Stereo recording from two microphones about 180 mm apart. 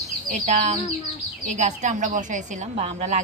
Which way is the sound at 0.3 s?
45° right (ahead or behind).